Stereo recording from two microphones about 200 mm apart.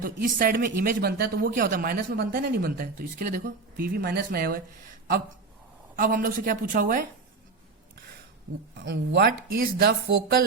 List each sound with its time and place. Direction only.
0.0 s speech: 45° right (ahead or behind)
6.0 s speech: 45° right (ahead or behind)
8.8 s speech: 55° right (ahead or behind)